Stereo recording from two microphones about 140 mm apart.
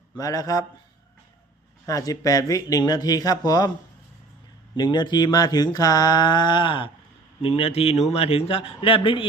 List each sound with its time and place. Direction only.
0.2 s speech: 25° left (ahead or behind)
1.9 s speech: 25° left (ahead or behind)
4.8 s mantra: 30° left (ahead or behind)
7.4 s speech: 45° left (ahead or behind)